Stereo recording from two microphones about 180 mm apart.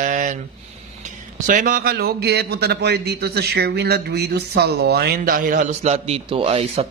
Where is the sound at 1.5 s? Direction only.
50° right (ahead or behind).